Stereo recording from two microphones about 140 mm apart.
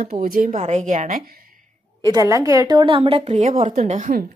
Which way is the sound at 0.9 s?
70° right (ahead or behind).